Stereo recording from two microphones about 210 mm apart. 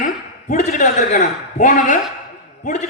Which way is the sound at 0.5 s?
40° left (ahead or behind).